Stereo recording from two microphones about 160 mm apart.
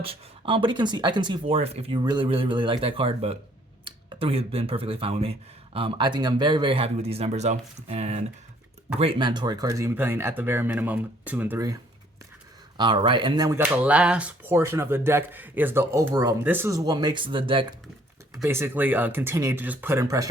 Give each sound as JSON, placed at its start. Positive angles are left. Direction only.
{"t": 0.0, "sound": "speech", "side_deg": -35}
{"t": 9.0, "sound": "speech", "side_deg": -30}
{"t": 12.7, "sound": "speech", "side_deg": -30}
{"t": 13.7, "sound": "speech", "side_deg": -10}
{"t": 18.4, "sound": "speech", "side_deg": -15}